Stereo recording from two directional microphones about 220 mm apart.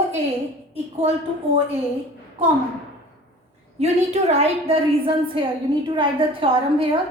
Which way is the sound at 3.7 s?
30° right (ahead or behind).